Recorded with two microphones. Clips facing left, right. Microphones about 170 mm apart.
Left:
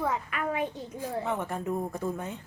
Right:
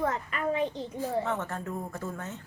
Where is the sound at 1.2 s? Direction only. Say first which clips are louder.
Left 1 dB; 15° left (ahead or behind).